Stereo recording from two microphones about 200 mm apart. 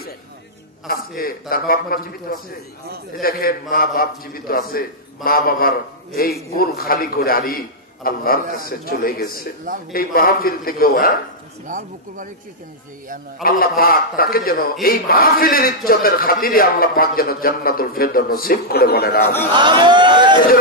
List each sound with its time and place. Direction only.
0.8 s a man's voice: 50° left (ahead or behind)
11.6 s speech: 40° right (ahead or behind)
13.4 s a man's voice: 45° left (ahead or behind)
19.2 s a man's voice: 10° left (ahead or behind)
19.5 s speech: 25° right (ahead or behind)